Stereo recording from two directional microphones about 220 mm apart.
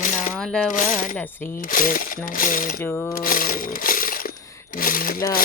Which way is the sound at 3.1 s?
40° left (ahead or behind).